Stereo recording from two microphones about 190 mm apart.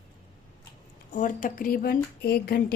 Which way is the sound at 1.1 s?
45° left (ahead or behind).